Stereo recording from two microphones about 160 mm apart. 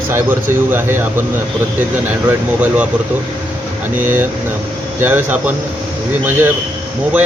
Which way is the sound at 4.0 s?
10° right (ahead or behind).